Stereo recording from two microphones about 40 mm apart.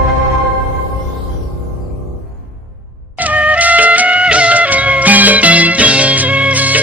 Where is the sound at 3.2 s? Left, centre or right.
Right.